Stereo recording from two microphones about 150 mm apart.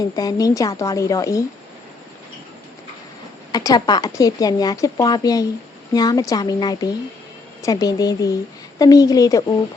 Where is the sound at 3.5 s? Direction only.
25° left (ahead or behind).